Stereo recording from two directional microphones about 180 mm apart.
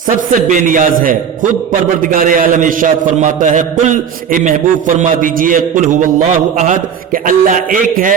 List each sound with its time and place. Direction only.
0.2 s a man's voice: 45° right (ahead or behind)